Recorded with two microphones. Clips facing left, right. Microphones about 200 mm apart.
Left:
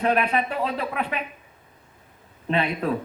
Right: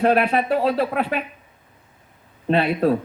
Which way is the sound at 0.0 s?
35° right (ahead or behind).